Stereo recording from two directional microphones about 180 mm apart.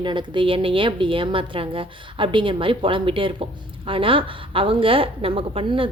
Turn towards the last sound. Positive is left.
turn(degrees=-30)  # may be behind; listen again after turning